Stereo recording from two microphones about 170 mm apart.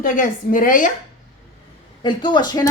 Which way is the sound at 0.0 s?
55° left (ahead or behind).